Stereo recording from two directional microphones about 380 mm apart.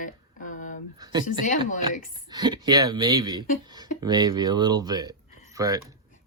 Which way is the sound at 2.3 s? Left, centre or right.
Centre.